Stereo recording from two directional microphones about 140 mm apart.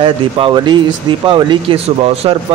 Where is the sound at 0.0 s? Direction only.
35° right (ahead or behind).